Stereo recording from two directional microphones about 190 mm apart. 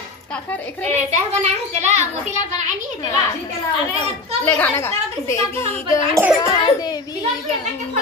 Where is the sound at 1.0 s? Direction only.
35° right (ahead or behind).